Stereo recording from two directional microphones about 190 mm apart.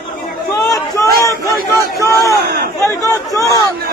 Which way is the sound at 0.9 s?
15° left (ahead or behind).